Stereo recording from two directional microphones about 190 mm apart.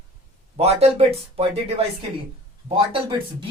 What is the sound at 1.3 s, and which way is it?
Speech, 30° right (ahead or behind).